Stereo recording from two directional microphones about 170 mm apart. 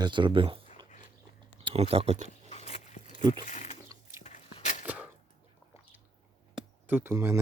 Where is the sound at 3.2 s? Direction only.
25° right (ahead or behind).